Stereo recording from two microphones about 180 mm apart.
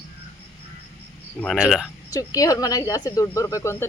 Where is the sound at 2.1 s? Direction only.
20° left (ahead or behind).